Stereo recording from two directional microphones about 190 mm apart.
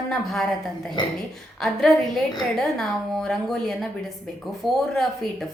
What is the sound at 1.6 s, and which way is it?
A woman's voice, centre (ahead or behind).